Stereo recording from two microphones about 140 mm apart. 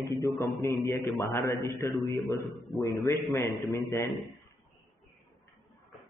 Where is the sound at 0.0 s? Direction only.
25° left (ahead or behind).